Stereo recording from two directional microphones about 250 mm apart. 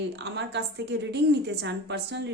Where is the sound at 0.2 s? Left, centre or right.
Right.